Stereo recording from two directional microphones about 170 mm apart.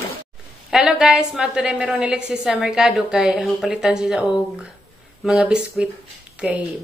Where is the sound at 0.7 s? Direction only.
5° right (ahead or behind).